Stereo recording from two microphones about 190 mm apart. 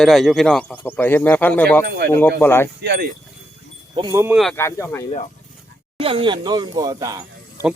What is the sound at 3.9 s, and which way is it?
Speech, 20° right (ahead or behind).